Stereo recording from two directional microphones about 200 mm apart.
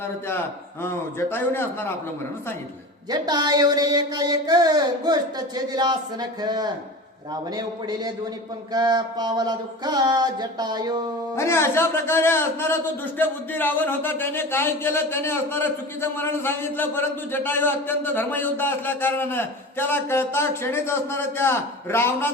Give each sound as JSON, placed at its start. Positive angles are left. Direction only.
{"t": 1.3, "sound": "a man's voice", "side_deg": 10}
{"t": 3.1, "sound": "speech", "side_deg": -20}
{"t": 11.3, "sound": "a man's voice", "side_deg": 15}